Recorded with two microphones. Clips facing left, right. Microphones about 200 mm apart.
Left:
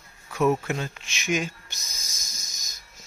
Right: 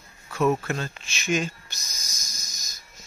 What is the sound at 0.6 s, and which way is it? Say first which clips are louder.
Speech: even; 15° left (ahead or behind).